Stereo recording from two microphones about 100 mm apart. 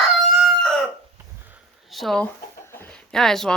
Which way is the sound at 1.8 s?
Centre (ahead or behind).